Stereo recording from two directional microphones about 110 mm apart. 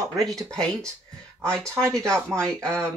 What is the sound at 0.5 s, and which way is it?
Speech, 5° left (ahead or behind).